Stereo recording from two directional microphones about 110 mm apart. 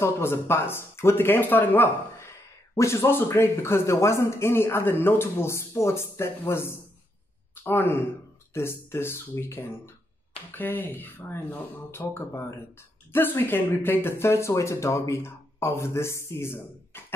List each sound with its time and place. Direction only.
0.0 s a man's voice: 20° left (ahead or behind)